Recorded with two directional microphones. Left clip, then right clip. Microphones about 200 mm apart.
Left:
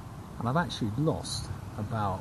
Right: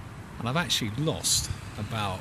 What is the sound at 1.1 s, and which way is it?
Speech, 10° right (ahead or behind).